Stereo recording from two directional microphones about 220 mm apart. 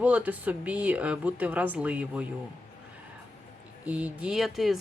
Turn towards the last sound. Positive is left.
turn(degrees=0)  # may be behind; listen again after turning